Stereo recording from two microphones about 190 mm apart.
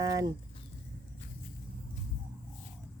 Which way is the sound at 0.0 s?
20° right (ahead or behind).